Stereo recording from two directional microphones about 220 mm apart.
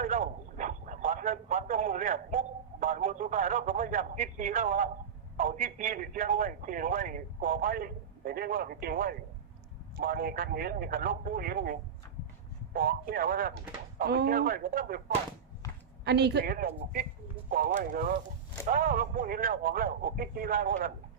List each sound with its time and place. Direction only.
0.0 s a sound: 35° right (ahead or behind)
2.8 s a man's voice: 35° right (ahead or behind)
16.0 s a woman's voice: 50° right (ahead or behind)